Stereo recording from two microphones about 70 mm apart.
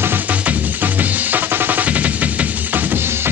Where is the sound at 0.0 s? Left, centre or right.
Right.